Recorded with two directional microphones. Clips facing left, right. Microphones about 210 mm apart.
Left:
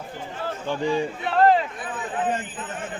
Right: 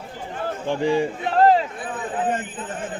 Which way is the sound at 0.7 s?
30° right (ahead or behind).